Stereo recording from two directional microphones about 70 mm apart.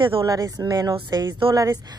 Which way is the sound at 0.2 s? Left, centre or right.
Right.